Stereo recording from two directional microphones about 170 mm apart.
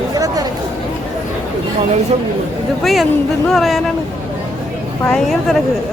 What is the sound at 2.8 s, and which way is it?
Speech, centre (ahead or behind).